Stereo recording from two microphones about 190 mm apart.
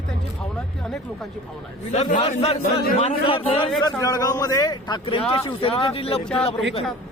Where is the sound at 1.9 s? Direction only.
35° left (ahead or behind).